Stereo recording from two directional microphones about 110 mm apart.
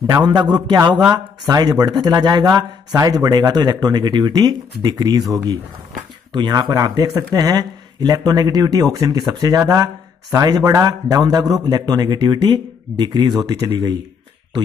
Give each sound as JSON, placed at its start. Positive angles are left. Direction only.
{"t": 0.0, "sound": "speech", "side_deg": -35}